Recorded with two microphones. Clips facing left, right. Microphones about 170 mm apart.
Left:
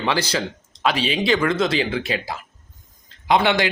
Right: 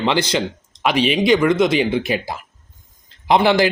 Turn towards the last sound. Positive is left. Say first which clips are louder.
# right 4 dB
turn(degrees=-30)  # may be behind; listen again after turning